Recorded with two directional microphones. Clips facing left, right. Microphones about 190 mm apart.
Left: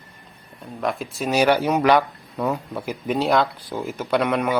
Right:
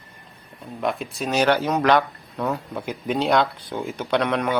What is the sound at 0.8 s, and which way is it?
Speech, centre (ahead or behind).